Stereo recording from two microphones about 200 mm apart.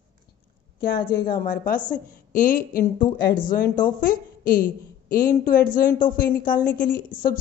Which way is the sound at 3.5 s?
45° left (ahead or behind).